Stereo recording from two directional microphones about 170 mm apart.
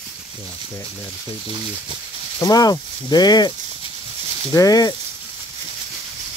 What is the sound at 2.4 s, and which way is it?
Speech, 20° left (ahead or behind).